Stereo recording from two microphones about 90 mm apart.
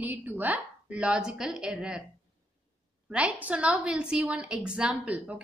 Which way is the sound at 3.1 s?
15° right (ahead or behind).